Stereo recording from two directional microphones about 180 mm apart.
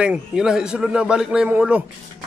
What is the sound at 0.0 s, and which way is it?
A man's voice, 5° right (ahead or behind).